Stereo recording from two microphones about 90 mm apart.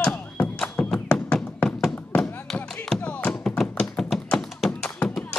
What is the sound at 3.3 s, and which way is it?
Thunk, 5° left (ahead or behind).